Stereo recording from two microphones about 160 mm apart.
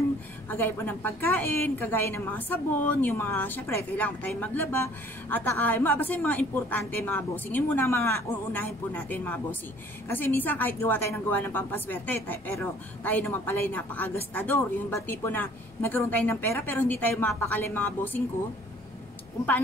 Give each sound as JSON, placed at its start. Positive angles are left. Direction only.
{"t": 0.5, "sound": "a woman's voice", "side_deg": 15}